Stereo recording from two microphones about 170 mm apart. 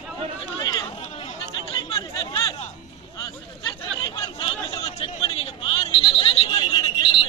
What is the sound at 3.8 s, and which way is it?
Chatter, 30° left (ahead or behind).